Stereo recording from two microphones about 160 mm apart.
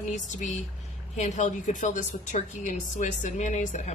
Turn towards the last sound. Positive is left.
turn(degrees=45)  # may be behind; listen again after turning